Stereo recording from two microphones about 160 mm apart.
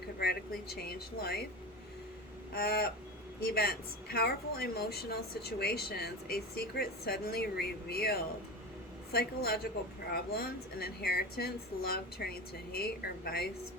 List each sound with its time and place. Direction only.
0.8 s speech: 75° left (ahead or behind)
2.5 s speech: 70° left (ahead or behind)